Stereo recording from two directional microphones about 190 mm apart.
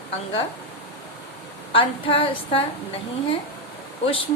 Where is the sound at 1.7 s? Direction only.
30° left (ahead or behind).